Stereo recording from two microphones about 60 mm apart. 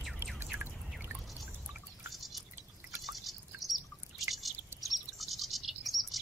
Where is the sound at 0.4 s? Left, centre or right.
Right.